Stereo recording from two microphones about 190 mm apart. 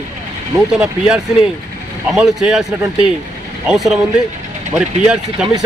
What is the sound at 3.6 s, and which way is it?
Speech, 5° right (ahead or behind).